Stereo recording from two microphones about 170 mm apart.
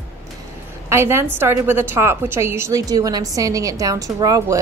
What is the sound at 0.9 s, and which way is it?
A woman's voice, 15° right (ahead or behind).